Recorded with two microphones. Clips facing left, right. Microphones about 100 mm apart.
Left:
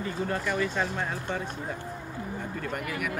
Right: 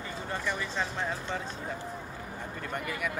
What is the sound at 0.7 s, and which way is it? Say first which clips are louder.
Speech: left 3 dB; 5° left (ahead or behind).